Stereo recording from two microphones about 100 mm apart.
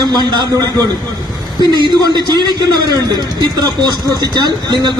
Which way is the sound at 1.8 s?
45° right (ahead or behind).